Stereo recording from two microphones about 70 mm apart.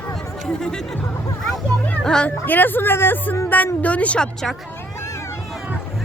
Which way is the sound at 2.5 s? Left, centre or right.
Left.